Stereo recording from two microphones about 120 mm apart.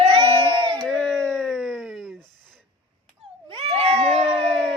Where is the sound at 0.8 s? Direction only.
Centre (ahead or behind).